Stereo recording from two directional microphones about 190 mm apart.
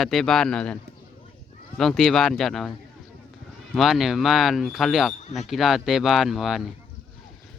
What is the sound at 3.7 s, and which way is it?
Speech, centre (ahead or behind).